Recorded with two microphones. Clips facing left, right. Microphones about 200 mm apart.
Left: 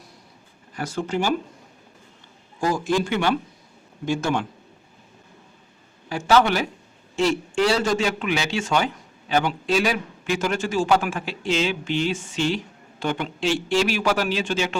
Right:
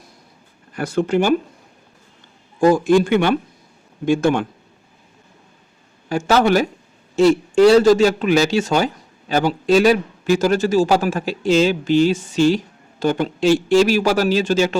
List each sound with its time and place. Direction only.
0.8 s speech: 55° right (ahead or behind)
2.6 s speech: 55° right (ahead or behind)
6.1 s a man's voice: 45° right (ahead or behind)